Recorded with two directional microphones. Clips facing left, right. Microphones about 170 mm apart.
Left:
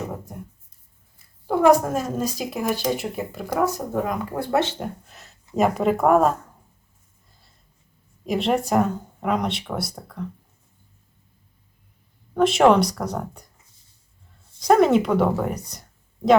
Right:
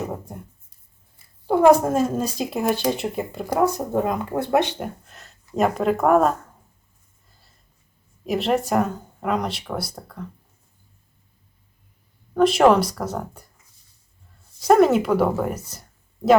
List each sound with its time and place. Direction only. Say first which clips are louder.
1.5 s speech: right 2 dB; 25° right (ahead or behind)
5.0 s speech: even; centre (ahead or behind)
8.2 s speech: even; centre (ahead or behind)
12.3 s speech: right 1 dB; centre (ahead or behind)
14.6 s speech: right 1 dB; 5° right (ahead or behind)